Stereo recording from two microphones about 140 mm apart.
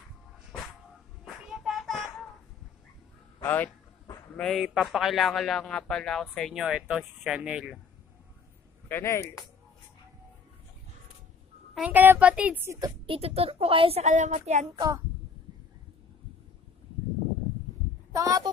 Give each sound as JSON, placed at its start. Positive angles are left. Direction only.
{"t": 1.2, "sound": "child singing", "side_deg": 0}
{"t": 3.4, "sound": "a man's voice", "side_deg": 15}
{"t": 4.4, "sound": "a man's voice", "side_deg": 0}
{"t": 8.8, "sound": "speech", "side_deg": 15}
{"t": 11.7, "sound": "a woman's voice", "side_deg": -10}
{"t": 13.0, "sound": "speech", "side_deg": -40}
{"t": 18.1, "sound": "speech", "side_deg": -25}